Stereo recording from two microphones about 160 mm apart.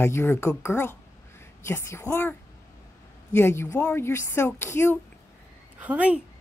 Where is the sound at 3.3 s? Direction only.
15° left (ahead or behind).